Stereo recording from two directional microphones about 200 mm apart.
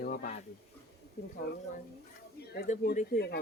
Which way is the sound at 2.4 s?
50° left (ahead or behind).